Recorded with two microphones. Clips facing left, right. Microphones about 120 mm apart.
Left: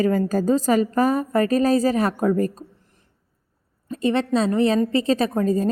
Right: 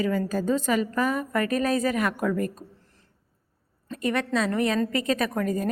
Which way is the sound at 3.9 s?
25° left (ahead or behind).